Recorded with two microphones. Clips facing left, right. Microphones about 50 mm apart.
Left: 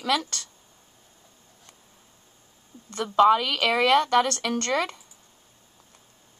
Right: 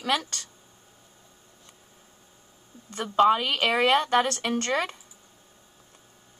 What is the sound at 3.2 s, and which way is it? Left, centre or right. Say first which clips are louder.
A woman's voice: left 2 dB; right.